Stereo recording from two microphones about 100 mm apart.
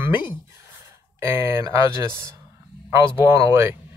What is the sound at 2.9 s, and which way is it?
Speech, 30° right (ahead or behind).